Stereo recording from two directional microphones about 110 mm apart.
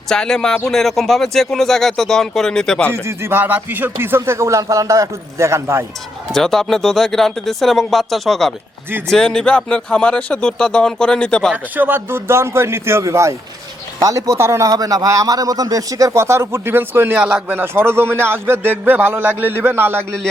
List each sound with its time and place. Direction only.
0.1 s speech: 5° left (ahead or behind)
2.9 s a man's voice: 25° right (ahead or behind)
6.3 s speech: 5° left (ahead or behind)
11.5 s a man's voice: 15° right (ahead or behind)